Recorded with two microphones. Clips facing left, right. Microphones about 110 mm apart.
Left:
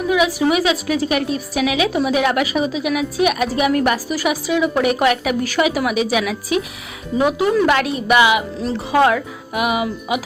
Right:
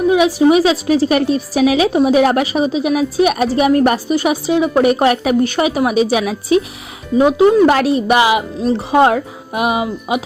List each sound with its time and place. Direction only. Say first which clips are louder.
0.1 s a woman's voice: right 5 dB; 30° right (ahead or behind)